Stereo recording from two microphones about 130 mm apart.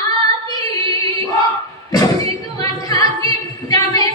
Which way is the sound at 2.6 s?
30° left (ahead or behind).